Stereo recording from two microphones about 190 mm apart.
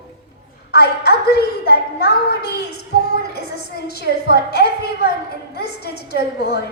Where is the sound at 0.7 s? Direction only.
55° left (ahead or behind).